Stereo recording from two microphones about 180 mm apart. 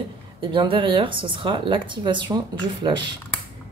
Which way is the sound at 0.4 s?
25° right (ahead or behind).